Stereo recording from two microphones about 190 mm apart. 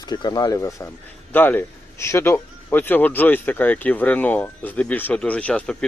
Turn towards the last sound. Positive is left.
turn(degrees=5)  # may be behind; listen again after turning